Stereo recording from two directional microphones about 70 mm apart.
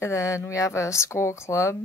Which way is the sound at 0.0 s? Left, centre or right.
Left.